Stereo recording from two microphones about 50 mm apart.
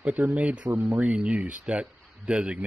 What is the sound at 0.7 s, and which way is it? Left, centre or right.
Speech, right.